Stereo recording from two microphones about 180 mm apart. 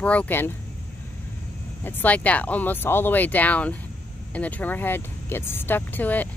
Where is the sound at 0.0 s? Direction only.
5° left (ahead or behind).